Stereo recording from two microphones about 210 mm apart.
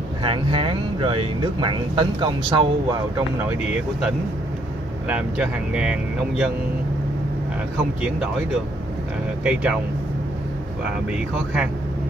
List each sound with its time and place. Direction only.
0.2 s speech: 25° right (ahead or behind)
5.0 s speech: 5° right (ahead or behind)
9.4 s speech: 5° right (ahead or behind)
11.1 s speech: 5° right (ahead or behind)